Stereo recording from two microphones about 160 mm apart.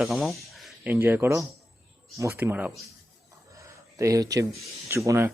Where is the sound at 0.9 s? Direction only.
15° right (ahead or behind).